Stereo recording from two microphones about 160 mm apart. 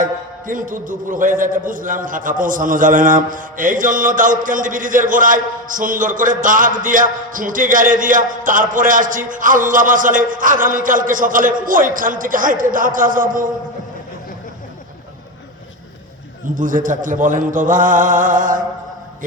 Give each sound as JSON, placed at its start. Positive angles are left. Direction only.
{"t": 0.0, "sound": "a man's voice", "side_deg": -55}
{"t": 16.6, "sound": "a man's voice", "side_deg": -55}